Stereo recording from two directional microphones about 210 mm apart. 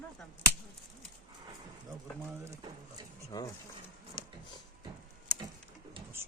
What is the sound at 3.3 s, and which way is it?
Speech, 15° left (ahead or behind).